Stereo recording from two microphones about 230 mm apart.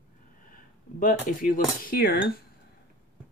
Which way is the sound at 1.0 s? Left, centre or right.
Left.